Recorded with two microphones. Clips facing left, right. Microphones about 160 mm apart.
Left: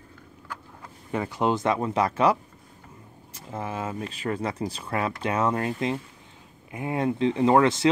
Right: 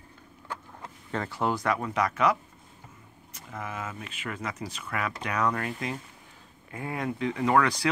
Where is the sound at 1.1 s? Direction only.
15° left (ahead or behind).